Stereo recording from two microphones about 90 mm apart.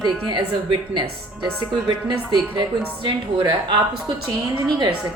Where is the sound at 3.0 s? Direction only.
60° right (ahead or behind).